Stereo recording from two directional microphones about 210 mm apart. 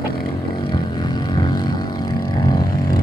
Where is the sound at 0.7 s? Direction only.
20° left (ahead or behind).